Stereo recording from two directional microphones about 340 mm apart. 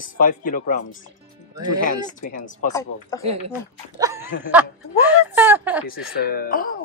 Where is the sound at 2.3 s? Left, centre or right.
Left.